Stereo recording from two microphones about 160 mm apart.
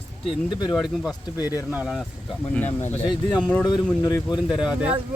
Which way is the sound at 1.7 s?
5° right (ahead or behind).